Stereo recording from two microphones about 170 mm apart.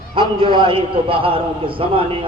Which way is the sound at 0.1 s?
30° right (ahead or behind).